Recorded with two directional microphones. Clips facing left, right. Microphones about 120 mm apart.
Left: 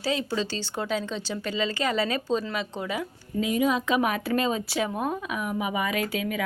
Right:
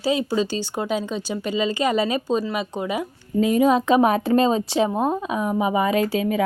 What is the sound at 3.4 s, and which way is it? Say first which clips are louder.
Speech: right 7 dB; 40° right (ahead or behind).